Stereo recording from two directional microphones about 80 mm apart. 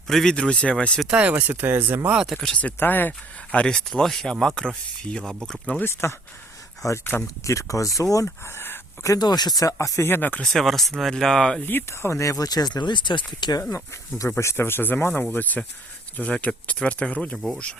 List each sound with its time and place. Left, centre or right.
0.1 s speech: centre
1.0 s speech: centre
1.3 s speech: right
2.1 s speech: centre
2.4 s speech: centre
5.8 s speech: left
7.4 s speech: left
8.4 s speech: left
9.1 s speech: left
10.1 s speech: left
10.4 s speech: centre
11.6 s speech: left
13.6 s speech: left; by 17.3 s centre
17.3 s speech: centre